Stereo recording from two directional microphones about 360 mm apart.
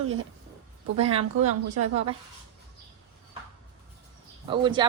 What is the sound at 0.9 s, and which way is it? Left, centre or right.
Speech, centre.